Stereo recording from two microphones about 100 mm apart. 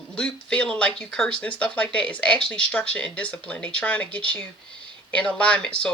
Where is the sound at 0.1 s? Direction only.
10° left (ahead or behind).